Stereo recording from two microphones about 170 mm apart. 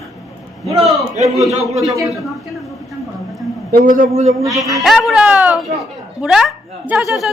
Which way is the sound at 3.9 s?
45° right (ahead or behind).